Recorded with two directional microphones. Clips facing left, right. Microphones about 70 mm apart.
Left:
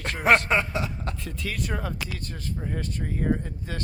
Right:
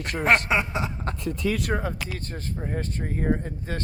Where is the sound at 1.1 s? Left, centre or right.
Right.